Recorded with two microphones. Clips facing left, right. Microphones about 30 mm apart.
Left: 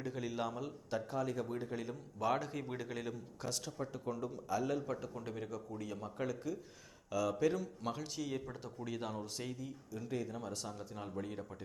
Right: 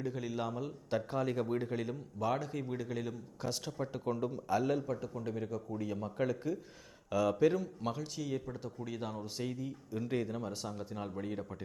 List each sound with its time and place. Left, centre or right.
0.0 s a man's voice: centre
0.9 s a man's voice: right
2.1 s a man's voice: centre
3.5 s speech: centre
3.9 s a man's voice: right
4.9 s a man's voice: centre
5.5 s a man's voice: centre
7.9 s a man's voice: centre
9.4 s speech: centre
10.1 s speech: right
10.3 s speech: centre